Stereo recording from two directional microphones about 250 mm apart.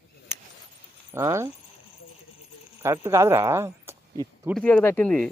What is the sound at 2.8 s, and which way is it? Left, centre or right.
Speech, centre.